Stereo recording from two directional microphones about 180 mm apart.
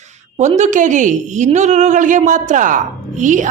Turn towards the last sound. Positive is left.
turn(degrees=-45)  # may be behind; listen again after turning